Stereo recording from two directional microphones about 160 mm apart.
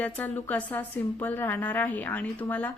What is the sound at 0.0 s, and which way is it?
Speech, 10° left (ahead or behind).